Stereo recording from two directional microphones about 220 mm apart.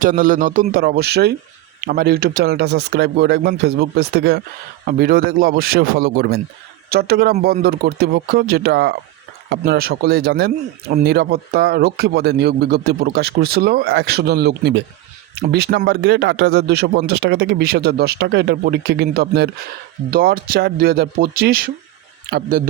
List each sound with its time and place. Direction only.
0.0 s a man's voice: 40° right (ahead or behind)